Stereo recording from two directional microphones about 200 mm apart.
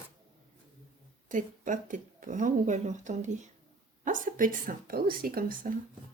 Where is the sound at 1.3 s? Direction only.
40° right (ahead or behind).